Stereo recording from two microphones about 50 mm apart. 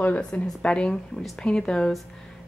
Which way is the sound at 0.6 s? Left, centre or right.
Centre.